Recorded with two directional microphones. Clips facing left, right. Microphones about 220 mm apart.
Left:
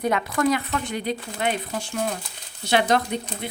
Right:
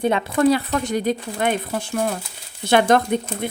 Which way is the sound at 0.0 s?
25° right (ahead or behind).